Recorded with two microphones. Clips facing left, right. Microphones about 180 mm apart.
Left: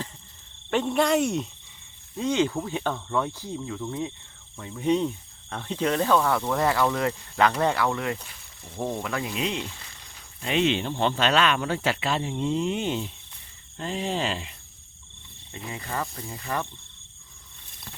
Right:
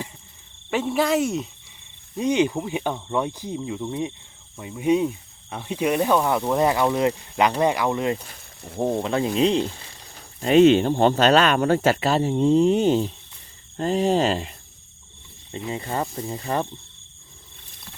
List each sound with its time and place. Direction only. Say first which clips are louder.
0.7 s speech: right 1 dB; 5° right (ahead or behind)
2.1 s speech: right 3 dB; 15° right (ahead or behind)
8.3 s a sound: right 6 dB; 55° right (ahead or behind)
8.8 s speech: right 7 dB; 25° right (ahead or behind)
15.5 s speech: right 5 dB; 30° right (ahead or behind)